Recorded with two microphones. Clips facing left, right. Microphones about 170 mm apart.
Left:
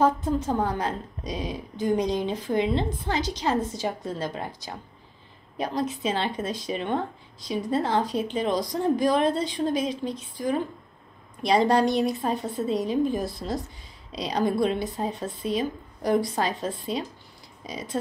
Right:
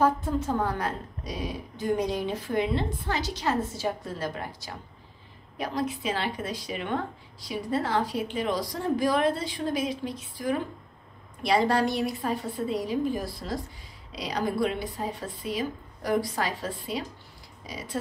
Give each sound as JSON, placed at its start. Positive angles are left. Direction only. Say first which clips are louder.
{"t": 0.0, "sound": "a woman's voice", "louder": "left 2 dB", "side_deg": 20}